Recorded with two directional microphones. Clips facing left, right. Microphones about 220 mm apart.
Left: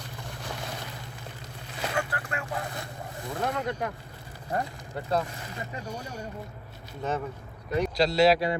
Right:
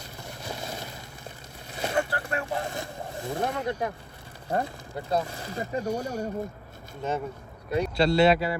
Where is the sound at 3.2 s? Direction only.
25° right (ahead or behind).